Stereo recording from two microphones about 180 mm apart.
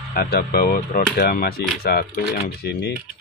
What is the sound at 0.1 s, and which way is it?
Speech, 60° left (ahead or behind).